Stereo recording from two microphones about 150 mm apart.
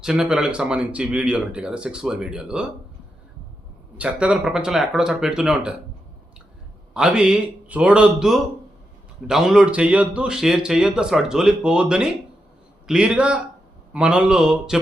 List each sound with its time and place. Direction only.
0.0 s speech: 5° right (ahead or behind)
3.9 s speech: 10° right (ahead or behind)
6.9 s a man's voice: 5° right (ahead or behind)